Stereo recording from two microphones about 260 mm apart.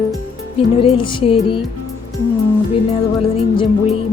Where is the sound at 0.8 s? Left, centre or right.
Centre.